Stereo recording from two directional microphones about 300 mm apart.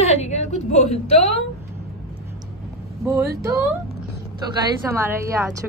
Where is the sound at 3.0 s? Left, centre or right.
Centre.